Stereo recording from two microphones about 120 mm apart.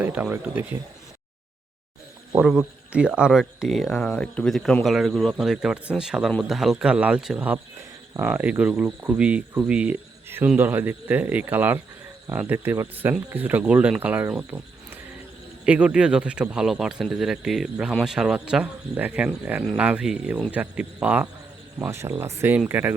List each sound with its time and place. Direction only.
0.0 s speech: 15° right (ahead or behind)
2.5 s speech: 10° right (ahead or behind)
15.6 s speech: 10° right (ahead or behind)